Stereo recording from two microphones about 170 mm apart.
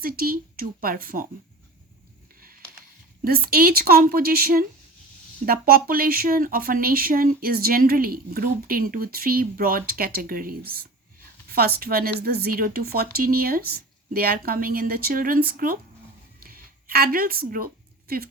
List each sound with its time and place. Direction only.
0.0 s speech: 55° right (ahead or behind)
3.2 s speech: 60° right (ahead or behind)
16.4 s a sound: 60° right (ahead or behind)